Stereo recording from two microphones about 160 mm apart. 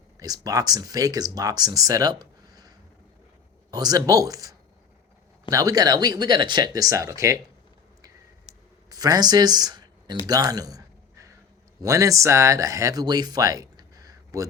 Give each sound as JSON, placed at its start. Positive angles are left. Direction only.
{"t": 0.2, "sound": "speech", "side_deg": -20}
{"t": 8.9, "sound": "speech", "side_deg": -25}
{"t": 10.2, "sound": "a sound", "side_deg": -25}
{"t": 11.8, "sound": "speech", "side_deg": -20}